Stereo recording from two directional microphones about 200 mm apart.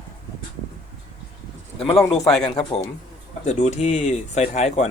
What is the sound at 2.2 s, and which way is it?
Speech, centre (ahead or behind).